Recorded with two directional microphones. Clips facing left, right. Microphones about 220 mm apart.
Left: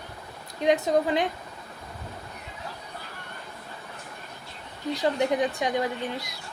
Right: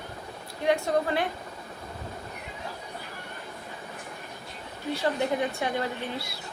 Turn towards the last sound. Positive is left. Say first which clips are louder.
# left 2 dB
turn(degrees=15)  # may be behind; listen again after turning